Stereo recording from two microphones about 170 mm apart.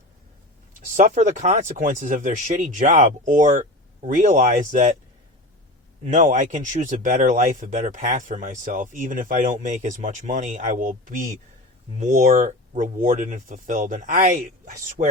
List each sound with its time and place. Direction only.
0.9 s speech: 45° right (ahead or behind)
6.1 s speech: 45° right (ahead or behind)